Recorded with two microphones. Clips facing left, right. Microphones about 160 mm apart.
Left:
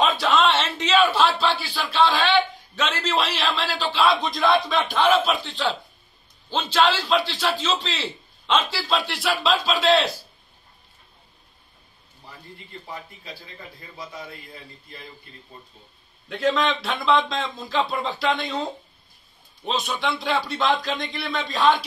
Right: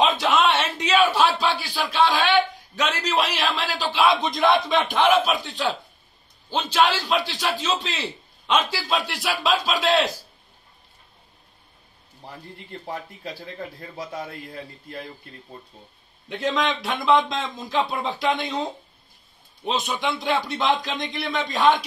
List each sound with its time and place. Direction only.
0.0 s a man's voice: 20° right (ahead or behind)
12.8 s a man's voice: 60° right (ahead or behind)
16.3 s speech: 20° right (ahead or behind)
19.6 s a man's voice: 15° right (ahead or behind)